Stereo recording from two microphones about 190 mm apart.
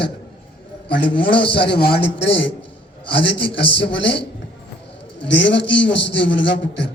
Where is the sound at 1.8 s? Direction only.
60° left (ahead or behind).